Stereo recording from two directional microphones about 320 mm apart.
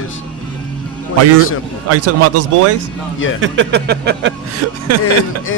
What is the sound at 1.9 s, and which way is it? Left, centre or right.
Speech, right.